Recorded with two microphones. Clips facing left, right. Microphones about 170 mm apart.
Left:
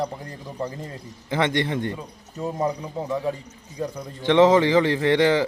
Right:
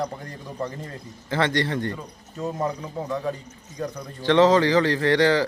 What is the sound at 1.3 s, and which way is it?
Speech, 15° left (ahead or behind).